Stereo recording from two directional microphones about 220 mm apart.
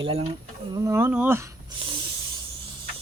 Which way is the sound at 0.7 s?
15° right (ahead or behind).